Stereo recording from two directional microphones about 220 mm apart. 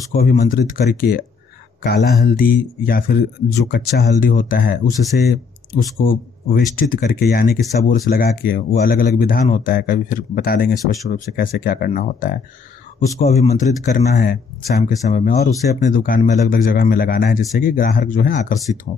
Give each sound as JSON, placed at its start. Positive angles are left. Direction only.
{"t": 0.1, "sound": "speech", "side_deg": 40}
{"t": 13.2, "sound": "speech", "side_deg": 30}
{"t": 14.1, "sound": "speech", "side_deg": 40}